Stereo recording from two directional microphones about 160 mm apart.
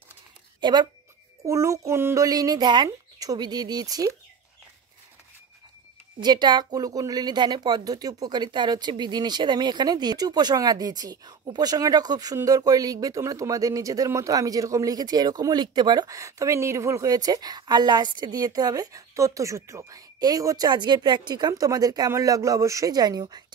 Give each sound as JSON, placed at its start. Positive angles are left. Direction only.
{"t": 0.6, "sound": "speech", "side_deg": -30}
{"t": 6.1, "sound": "speech", "side_deg": -30}